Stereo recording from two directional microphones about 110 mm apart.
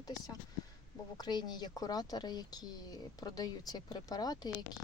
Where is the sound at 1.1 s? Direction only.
40° left (ahead or behind).